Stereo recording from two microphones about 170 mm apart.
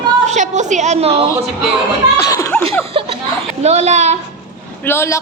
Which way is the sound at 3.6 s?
40° right (ahead or behind).